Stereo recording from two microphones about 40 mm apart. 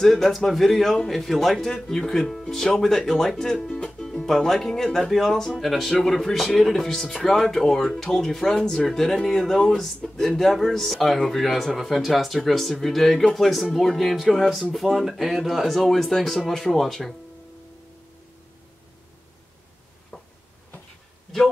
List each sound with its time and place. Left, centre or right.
0.1 s speech: centre
5.5 s speech: centre
20.1 s a sound: left